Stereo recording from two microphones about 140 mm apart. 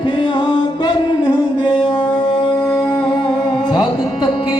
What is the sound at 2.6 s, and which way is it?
Music, 10° left (ahead or behind).